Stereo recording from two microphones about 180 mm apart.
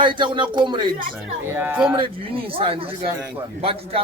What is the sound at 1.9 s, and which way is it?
A man's voice, 30° right (ahead or behind).